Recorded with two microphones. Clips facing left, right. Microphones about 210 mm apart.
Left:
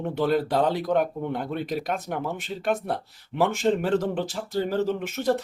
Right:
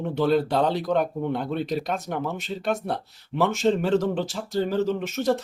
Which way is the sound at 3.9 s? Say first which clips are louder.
Right 2 dB; 55° left (ahead or behind).